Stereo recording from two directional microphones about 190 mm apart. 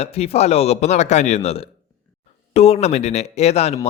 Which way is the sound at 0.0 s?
35° left (ahead or behind).